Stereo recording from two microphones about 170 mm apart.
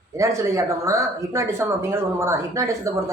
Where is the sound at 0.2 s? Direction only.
20° right (ahead or behind).